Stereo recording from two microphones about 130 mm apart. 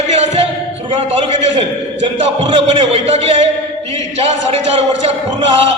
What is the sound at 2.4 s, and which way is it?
A man's voice, 40° right (ahead or behind).